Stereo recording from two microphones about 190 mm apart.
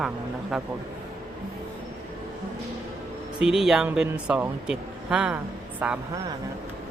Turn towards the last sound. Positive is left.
turn(degrees=-5)  # may be behind; listen again after turning